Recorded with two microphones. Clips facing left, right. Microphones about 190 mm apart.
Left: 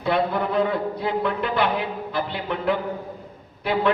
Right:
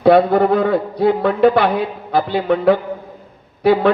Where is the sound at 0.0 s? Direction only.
70° right (ahead or behind).